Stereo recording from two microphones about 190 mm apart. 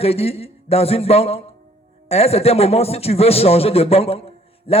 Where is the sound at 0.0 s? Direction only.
30° left (ahead or behind).